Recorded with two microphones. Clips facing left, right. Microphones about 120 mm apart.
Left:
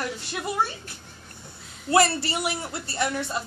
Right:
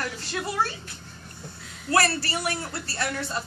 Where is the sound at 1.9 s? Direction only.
20° left (ahead or behind).